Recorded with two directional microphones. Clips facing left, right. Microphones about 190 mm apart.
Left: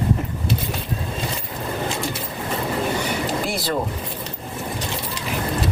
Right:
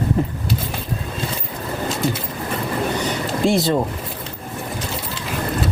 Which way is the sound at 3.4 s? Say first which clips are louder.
Right 9 dB; 25° right (ahead or behind).